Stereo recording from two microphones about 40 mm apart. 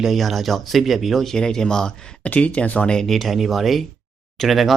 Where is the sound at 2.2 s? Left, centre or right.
Left.